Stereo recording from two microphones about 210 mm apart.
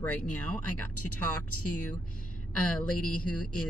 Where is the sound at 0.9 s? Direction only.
90° left.